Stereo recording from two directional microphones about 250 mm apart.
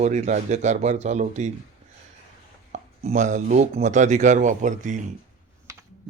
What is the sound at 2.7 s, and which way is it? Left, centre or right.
Speech, right.